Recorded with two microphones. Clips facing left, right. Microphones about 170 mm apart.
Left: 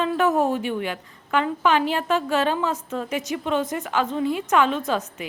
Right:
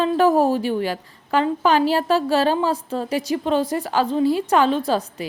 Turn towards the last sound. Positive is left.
turn(degrees=-35)  # may be behind; listen again after turning